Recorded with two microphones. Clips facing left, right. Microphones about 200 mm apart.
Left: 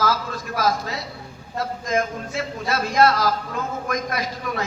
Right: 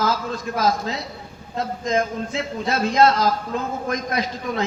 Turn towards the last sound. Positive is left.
turn(degrees=-25)  # may be behind; listen again after turning